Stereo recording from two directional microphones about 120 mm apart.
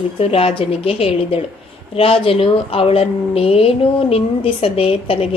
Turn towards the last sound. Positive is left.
turn(degrees=55)  # may be behind; listen again after turning